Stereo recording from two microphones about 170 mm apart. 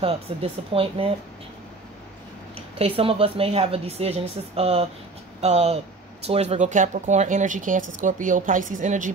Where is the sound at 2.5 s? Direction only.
35° right (ahead or behind).